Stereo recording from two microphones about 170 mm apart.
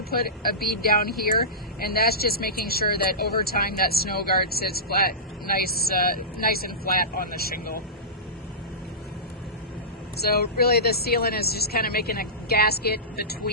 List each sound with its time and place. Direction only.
0.1 s speech: 60° left (ahead or behind)
10.2 s speech: 65° left (ahead or behind)